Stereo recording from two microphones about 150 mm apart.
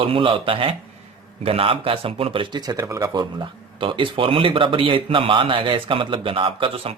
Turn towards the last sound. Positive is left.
turn(degrees=-40)  # may be behind; listen again after turning